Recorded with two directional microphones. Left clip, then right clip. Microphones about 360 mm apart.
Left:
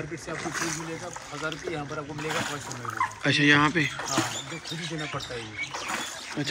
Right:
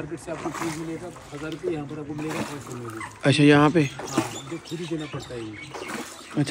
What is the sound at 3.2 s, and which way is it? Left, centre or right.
Speech, centre.